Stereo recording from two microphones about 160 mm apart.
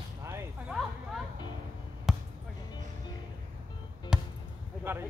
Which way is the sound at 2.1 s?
Centre (ahead or behind).